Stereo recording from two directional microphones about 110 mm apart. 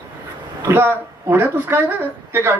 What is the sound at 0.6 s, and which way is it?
Speech, 20° right (ahead or behind).